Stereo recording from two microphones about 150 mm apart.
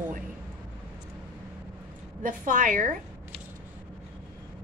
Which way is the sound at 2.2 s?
65° right (ahead or behind).